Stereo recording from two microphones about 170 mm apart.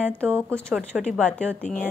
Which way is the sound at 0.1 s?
5° left (ahead or behind).